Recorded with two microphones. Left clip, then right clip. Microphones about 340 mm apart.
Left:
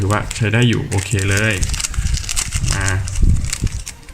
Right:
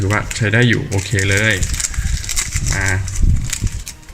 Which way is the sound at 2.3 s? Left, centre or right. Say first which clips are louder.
Right 3 dB; centre.